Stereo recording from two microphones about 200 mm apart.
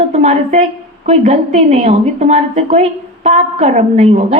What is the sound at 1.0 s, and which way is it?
A woman's voice, 35° right (ahead or behind).